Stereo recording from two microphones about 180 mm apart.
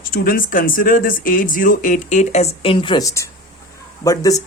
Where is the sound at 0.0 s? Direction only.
55° left (ahead or behind).